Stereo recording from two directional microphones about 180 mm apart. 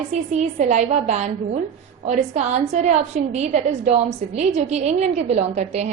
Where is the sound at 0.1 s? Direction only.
40° right (ahead or behind).